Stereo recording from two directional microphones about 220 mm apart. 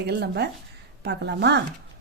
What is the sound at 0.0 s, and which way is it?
Speech, 50° right (ahead or behind).